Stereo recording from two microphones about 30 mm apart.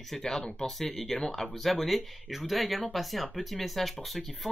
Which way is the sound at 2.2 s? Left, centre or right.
Centre.